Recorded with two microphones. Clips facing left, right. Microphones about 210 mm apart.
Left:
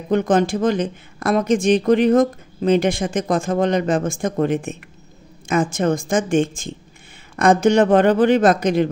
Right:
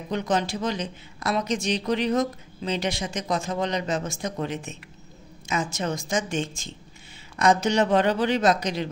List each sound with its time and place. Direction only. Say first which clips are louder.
0.1 s speech: left 9 dB; 50° left (ahead or behind)